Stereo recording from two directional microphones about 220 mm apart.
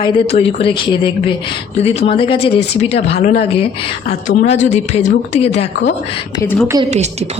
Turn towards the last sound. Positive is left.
turn(degrees=-30)  # may be behind; listen again after turning